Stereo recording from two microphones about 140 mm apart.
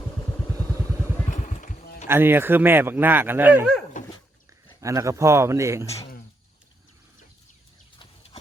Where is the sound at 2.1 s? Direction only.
15° right (ahead or behind).